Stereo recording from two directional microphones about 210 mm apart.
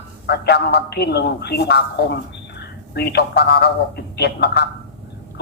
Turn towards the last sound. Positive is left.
turn(degrees=50)  # may be behind; listen again after turning